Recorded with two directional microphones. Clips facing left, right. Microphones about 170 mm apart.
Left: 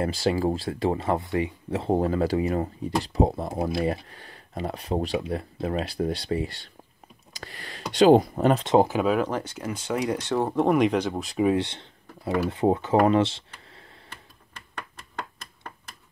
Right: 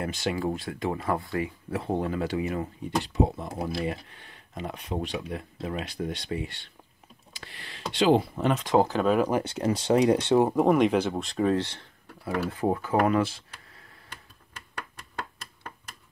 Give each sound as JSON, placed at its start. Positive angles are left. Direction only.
{"t": 0.0, "sound": "speech", "side_deg": 35}
{"t": 7.3, "sound": "a sound", "side_deg": 40}
{"t": 7.9, "sound": "speech", "side_deg": 45}
{"t": 8.8, "sound": "speech", "side_deg": 5}
{"t": 9.4, "sound": "speech", "side_deg": -30}
{"t": 10.4, "sound": "speech", "side_deg": -5}
{"t": 11.4, "sound": "speech", "side_deg": 15}